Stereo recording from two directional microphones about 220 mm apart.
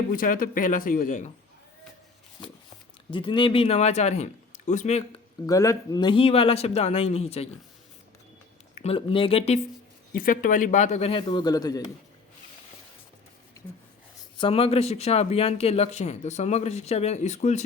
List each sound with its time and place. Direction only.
0.1 s speech: 40° left (ahead or behind)
3.1 s speech: 20° left (ahead or behind)
5.5 s speech: 15° left (ahead or behind)
8.7 s speech: 25° left (ahead or behind)
10.2 s speech: 40° left (ahead or behind); by 11.8 s 15° left (ahead or behind)
14.3 s speech: 25° left (ahead or behind)